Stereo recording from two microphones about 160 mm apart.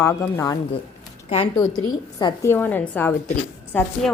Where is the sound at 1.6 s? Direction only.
25° left (ahead or behind).